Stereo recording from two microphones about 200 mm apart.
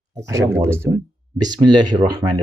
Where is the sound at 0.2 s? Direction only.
15° right (ahead or behind).